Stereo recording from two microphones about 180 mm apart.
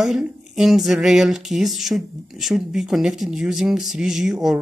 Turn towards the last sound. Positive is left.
turn(degrees=0)  # may be behind; listen again after turning